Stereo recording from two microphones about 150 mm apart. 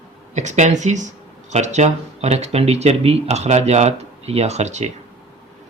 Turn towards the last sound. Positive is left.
turn(degrees=-50)  # may be behind; listen again after turning